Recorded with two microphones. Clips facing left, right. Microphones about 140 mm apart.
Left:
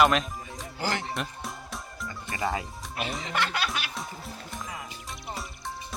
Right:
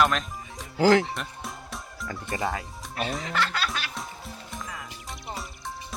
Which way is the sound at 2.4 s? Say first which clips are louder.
Left 4 dB; centre (ahead or behind).